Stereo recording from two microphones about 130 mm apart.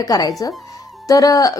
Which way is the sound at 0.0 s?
30° left (ahead or behind).